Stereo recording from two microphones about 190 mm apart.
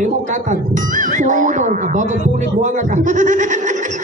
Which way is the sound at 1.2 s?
40° right (ahead or behind).